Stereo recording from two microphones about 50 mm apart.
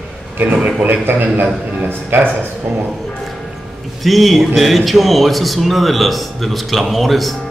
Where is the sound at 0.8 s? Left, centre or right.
Right.